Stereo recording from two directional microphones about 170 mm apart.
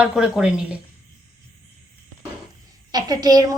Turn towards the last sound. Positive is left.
turn(degrees=-20)  # may be behind; listen again after turning